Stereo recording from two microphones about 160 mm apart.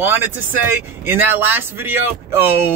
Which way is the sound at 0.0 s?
10° right (ahead or behind).